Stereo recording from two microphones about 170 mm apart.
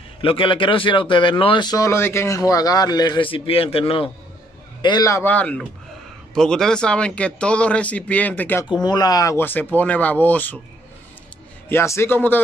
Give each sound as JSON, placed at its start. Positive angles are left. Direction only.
{"t": 0.2, "sound": "speech", "side_deg": 30}
{"t": 4.8, "sound": "speech", "side_deg": 20}
{"t": 8.6, "sound": "speech", "side_deg": 25}
{"t": 11.7, "sound": "speech", "side_deg": 15}